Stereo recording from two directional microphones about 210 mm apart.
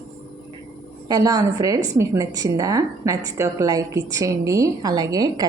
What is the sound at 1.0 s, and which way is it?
A woman's voice, 20° right (ahead or behind).